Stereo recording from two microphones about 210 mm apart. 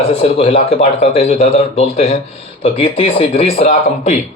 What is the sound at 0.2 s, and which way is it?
Speech, 25° left (ahead or behind).